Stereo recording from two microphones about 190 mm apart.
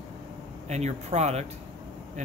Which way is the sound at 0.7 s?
35° right (ahead or behind).